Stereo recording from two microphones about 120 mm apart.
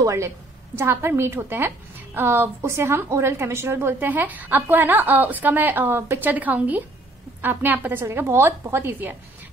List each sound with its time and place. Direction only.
0.0 s a woman's voice: 25° right (ahead or behind)